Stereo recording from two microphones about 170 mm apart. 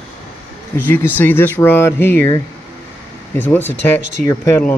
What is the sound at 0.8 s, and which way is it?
Speech, 10° left (ahead or behind).